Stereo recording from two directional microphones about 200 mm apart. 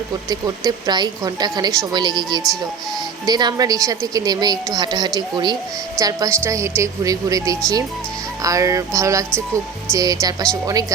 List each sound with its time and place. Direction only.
0.3 s a woman's voice: 20° right (ahead or behind)